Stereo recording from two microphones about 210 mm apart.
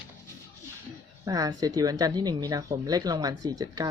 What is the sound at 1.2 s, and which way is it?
Speech, 15° right (ahead or behind).